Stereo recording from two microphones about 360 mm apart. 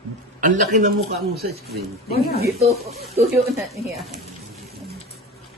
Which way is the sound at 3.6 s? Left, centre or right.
Centre.